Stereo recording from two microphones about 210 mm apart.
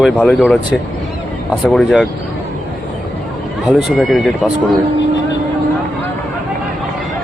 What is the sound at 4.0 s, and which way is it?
Speech, centre (ahead or behind).